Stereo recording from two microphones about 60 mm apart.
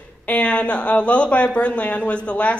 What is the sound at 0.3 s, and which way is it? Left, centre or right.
Speech, left.